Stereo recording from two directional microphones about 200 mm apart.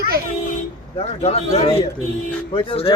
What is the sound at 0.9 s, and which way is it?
Speech, 30° left (ahead or behind).